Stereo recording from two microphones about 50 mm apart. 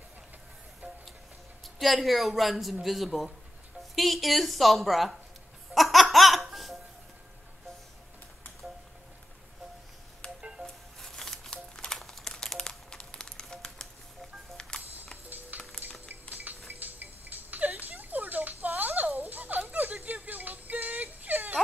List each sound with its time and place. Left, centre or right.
1.6 s speech: centre
5.8 s music: centre
10.2 s music: centre
10.6 s music: centre
12.0 s music: centre
15.2 s music: right
15.8 s a sound: right